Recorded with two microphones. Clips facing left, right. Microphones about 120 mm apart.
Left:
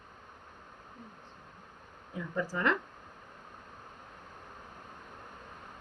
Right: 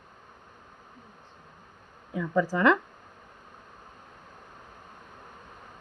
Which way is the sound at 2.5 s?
90° right.